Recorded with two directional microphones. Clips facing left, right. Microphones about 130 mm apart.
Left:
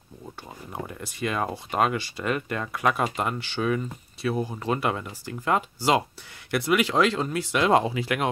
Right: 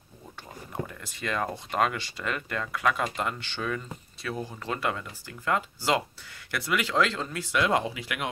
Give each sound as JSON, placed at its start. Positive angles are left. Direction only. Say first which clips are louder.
{"t": 0.7, "sound": "speech", "louder": "left 3 dB", "side_deg": 15}
{"t": 2.3, "sound": "speech", "louder": "left 3 dB", "side_deg": 25}
{"t": 3.2, "sound": "speech", "louder": "left 4 dB", "side_deg": 10}
{"t": 7.6, "sound": "speech", "louder": "left 7 dB", "side_deg": 30}